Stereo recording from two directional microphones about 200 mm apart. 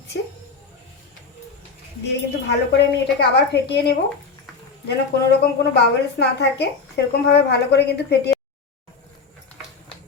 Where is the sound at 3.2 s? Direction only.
55° left (ahead or behind).